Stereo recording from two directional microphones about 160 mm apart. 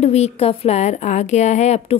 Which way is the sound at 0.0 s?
40° left (ahead or behind).